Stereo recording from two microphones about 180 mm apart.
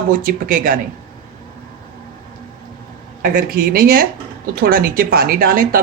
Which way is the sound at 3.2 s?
50° right (ahead or behind).